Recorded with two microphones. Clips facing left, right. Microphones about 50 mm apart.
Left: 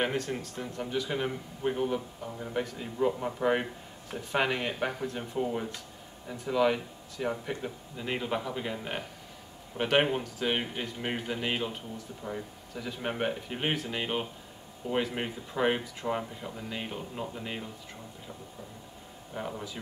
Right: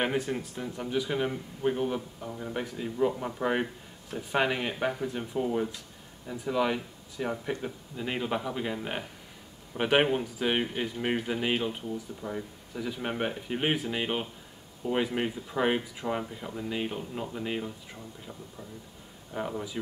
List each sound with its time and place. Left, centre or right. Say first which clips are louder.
0.0 s speech: right 1 dB; centre
19.3 s speech: right 3 dB; centre